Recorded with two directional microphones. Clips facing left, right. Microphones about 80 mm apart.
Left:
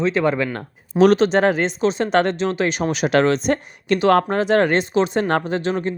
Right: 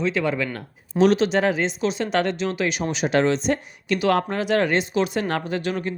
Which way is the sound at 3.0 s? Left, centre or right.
Left.